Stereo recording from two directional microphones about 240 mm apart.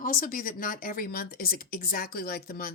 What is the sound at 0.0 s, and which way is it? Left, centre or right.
Speech, left.